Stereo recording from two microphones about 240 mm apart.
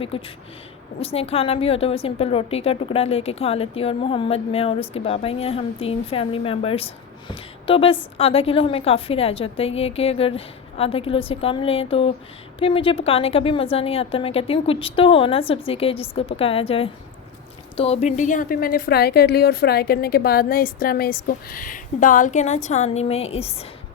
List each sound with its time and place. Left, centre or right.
0.1 s a woman's voice: left